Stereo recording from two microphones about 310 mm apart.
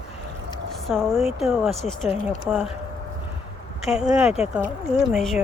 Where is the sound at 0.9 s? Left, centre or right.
Centre.